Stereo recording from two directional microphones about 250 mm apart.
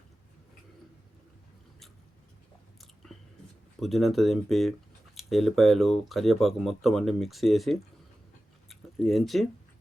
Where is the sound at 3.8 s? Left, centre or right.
Centre.